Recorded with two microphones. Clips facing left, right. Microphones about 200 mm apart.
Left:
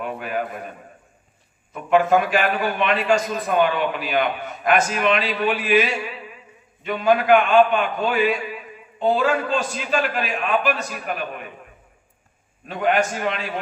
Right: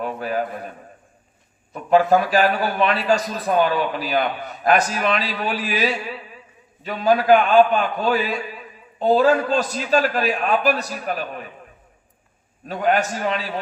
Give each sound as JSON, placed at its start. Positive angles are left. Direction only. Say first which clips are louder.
{"t": 0.0, "sound": "a man's voice", "louder": "right 3 dB", "side_deg": -35}
{"t": 1.7, "sound": "a man's voice", "louder": "right 1 dB", "side_deg": -35}
{"t": 12.6, "sound": "a man's voice", "louder": "even", "side_deg": -40}